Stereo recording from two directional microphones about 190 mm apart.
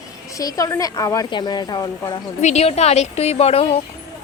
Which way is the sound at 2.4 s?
35° left (ahead or behind).